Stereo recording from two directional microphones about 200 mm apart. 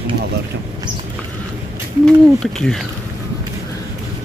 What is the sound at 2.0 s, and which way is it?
Speech, 5° left (ahead or behind).